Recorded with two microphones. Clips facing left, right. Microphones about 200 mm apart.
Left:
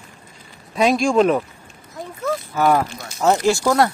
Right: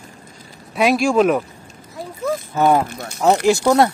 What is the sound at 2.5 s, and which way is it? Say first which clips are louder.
Speech: right 2 dB; 20° right (ahead or behind).